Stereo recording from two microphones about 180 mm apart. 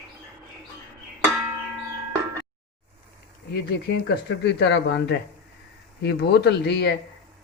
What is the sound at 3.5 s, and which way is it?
Speech, 65° left (ahead or behind).